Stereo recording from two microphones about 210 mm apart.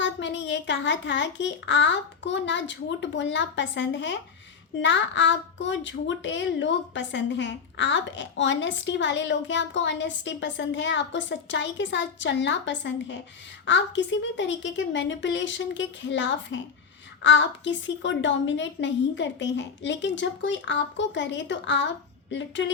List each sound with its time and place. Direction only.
0.0 s a woman's voice: 60° left (ahead or behind)